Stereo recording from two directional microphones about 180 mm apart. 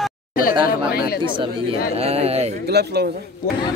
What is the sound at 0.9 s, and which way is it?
Chatter, 55° left (ahead or behind).